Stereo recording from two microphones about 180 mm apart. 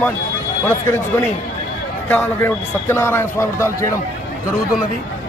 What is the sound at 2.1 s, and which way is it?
Speech, 10° left (ahead or behind).